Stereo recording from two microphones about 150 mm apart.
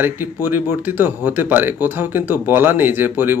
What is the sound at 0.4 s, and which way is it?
Speech, 15° right (ahead or behind).